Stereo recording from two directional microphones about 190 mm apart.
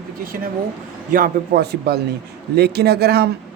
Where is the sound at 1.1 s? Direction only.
50° right (ahead or behind).